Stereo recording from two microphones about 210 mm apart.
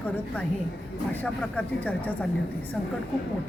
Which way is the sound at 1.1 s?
5° left (ahead or behind).